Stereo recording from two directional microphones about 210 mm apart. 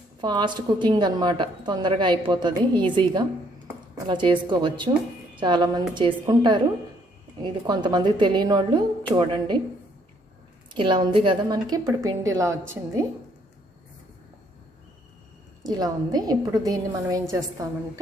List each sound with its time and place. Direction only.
0.2 s a woman's voice: 20° right (ahead or behind)
10.8 s a woman's voice: 25° right (ahead or behind)
15.6 s a woman's voice: 20° right (ahead or behind)